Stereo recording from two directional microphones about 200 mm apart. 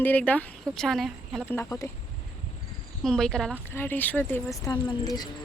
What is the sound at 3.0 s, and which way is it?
Speech, 5° left (ahead or behind).